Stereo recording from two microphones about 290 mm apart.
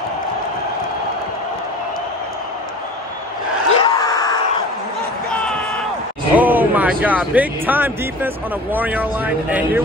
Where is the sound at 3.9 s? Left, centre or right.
Centre.